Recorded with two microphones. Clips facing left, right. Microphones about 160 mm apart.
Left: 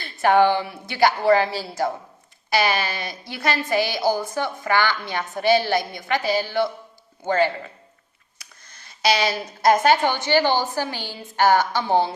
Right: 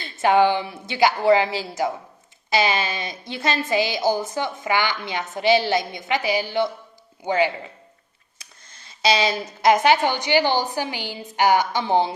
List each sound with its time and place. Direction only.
0.0 s a woman's voice: 20° right (ahead or behind)
9.0 s a woman's voice: 25° right (ahead or behind)